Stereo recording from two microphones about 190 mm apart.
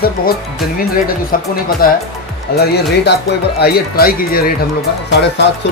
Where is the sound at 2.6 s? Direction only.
60° left (ahead or behind).